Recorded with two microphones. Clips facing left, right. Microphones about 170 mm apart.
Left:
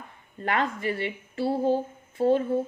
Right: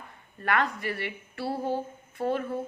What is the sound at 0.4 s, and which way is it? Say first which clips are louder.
A woman's voice: left 1 dB; 25° left (ahead or behind).